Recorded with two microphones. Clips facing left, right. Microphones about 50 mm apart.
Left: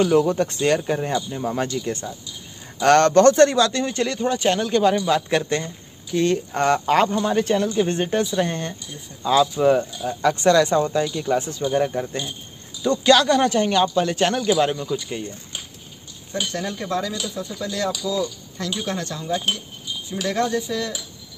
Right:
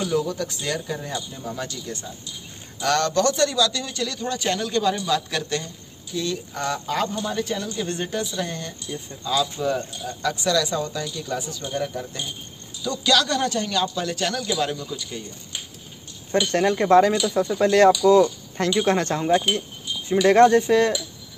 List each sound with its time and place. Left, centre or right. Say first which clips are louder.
0.0 s speech: left 7 dB; left
6.1 s speech: left 7 dB; left
7.7 s speech: left 6 dB; left
16.3 s speech: right 7 dB; right